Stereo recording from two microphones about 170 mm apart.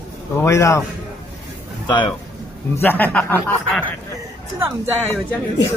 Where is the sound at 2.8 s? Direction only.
10° left (ahead or behind).